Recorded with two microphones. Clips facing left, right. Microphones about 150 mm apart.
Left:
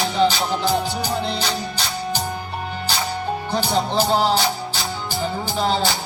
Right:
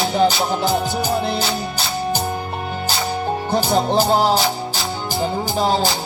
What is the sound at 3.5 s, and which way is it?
Music, 45° right (ahead or behind).